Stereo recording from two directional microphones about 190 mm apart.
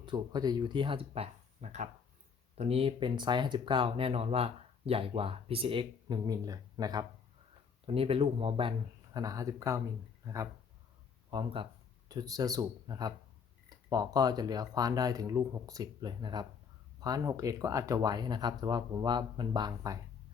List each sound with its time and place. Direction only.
0.0 s speech: 25° right (ahead or behind)
9.1 s speech: 20° right (ahead or behind)